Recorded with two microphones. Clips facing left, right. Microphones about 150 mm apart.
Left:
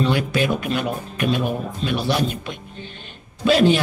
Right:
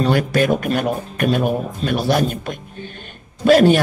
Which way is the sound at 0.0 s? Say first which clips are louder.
Right 3 dB; 45° right (ahead or behind).